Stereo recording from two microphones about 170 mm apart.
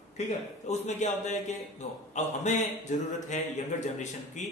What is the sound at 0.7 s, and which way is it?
A man's voice, 40° left (ahead or behind).